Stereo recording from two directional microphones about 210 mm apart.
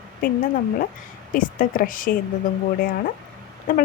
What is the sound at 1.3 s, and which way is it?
Speech, 40° left (ahead or behind).